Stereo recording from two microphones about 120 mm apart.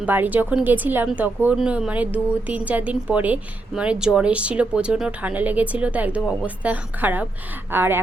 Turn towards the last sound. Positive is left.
turn(degrees=-20)  # may be behind; listen again after turning